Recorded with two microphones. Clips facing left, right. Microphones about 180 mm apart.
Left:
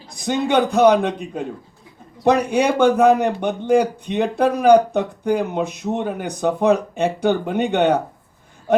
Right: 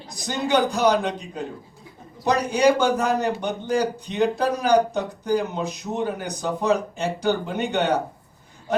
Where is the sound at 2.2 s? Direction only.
60° left (ahead or behind).